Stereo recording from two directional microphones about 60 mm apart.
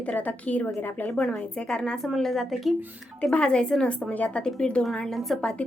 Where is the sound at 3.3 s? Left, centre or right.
Centre.